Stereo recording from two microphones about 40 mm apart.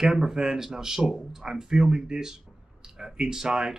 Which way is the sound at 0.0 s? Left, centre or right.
Centre.